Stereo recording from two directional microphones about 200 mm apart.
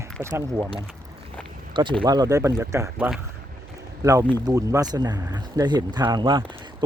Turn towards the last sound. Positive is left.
turn(degrees=-25)  # may be behind; listen again after turning